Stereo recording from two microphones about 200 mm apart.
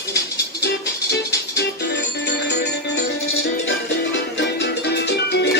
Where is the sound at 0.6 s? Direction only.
55° left (ahead or behind).